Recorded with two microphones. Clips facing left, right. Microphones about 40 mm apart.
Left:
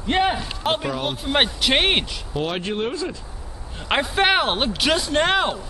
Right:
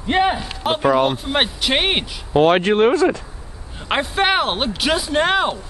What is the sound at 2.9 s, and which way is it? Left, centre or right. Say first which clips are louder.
Speech: right 11 dB; right.